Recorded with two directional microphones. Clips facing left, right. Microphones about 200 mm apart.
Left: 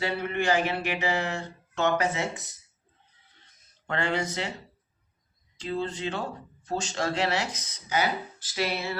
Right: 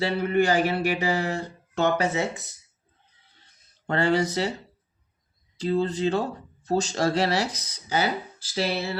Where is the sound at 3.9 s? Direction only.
35° right (ahead or behind).